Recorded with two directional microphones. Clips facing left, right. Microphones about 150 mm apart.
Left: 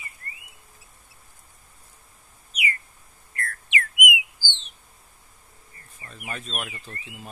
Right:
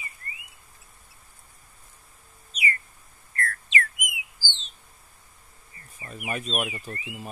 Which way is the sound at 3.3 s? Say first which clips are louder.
Right 3 dB; 15° left (ahead or behind).